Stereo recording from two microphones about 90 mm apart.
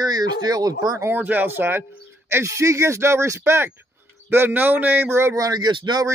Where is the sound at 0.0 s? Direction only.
50° right (ahead or behind).